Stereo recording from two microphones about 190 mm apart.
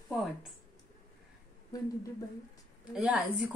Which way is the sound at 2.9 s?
5° right (ahead or behind).